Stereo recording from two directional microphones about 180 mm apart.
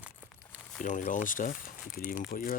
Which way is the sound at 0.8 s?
45° left (ahead or behind).